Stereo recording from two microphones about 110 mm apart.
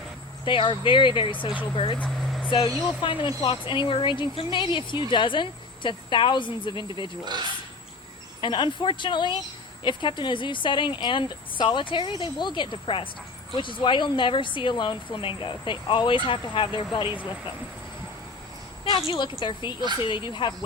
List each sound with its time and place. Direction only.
0.4 s speech: 50° left (ahead or behind)
2.0 s vehicle: 5° left (ahead or behind)
3.0 s speech: 50° left (ahead or behind)
8.4 s speech: 45° left (ahead or behind)
19.0 s speech: 45° left (ahead or behind)